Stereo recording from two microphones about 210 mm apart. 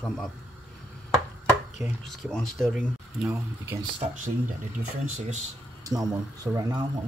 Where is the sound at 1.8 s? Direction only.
Centre (ahead or behind).